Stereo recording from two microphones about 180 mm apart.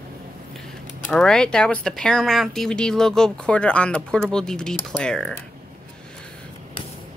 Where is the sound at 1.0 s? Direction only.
5° left (ahead or behind).